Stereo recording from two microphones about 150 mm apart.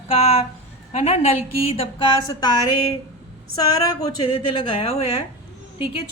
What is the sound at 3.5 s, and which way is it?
A woman's voice, 25° left (ahead or behind).